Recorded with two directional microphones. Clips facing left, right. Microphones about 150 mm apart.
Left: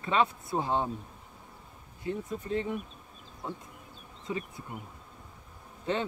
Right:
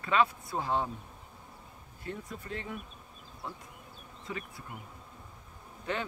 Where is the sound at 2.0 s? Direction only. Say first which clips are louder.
Left 6 dB; 20° left (ahead or behind).